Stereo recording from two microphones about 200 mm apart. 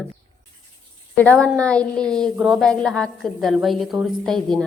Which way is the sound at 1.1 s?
5° left (ahead or behind).